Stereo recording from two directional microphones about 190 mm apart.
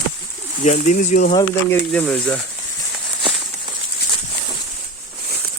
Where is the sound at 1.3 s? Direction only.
20° left (ahead or behind).